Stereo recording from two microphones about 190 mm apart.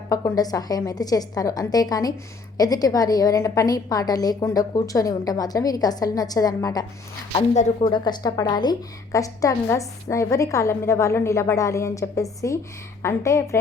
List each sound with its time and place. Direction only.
0.1 s a woman's voice: 20° left (ahead or behind)
7.5 s speech: 40° left (ahead or behind)
7.9 s a woman's voice: 25° left (ahead or behind)